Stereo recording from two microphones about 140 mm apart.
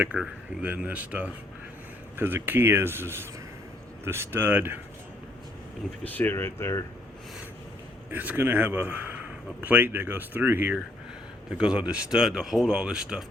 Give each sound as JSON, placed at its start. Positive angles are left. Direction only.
{"t": 0.0, "sound": "speech", "side_deg": -10}
{"t": 6.1, "sound": "speech", "side_deg": 15}
{"t": 8.1, "sound": "speech", "side_deg": -10}